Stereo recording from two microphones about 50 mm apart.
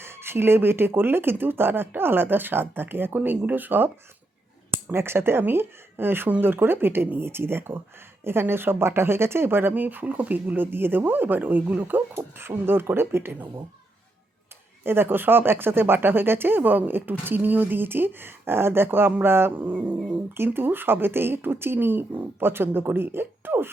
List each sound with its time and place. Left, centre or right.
0.0 s speech: right
4.9 s speech: right
14.8 s speech: right
20.3 s speech: right